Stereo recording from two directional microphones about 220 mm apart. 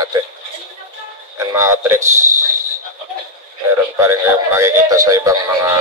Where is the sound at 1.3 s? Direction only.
15° right (ahead or behind).